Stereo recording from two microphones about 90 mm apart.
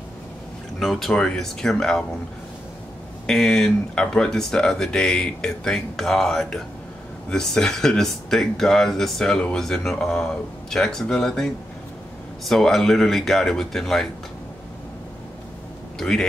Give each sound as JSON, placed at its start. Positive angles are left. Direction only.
{"t": 0.7, "sound": "speech", "side_deg": 0}
{"t": 3.3, "sound": "speech", "side_deg": 5}
{"t": 16.0, "sound": "speech", "side_deg": 5}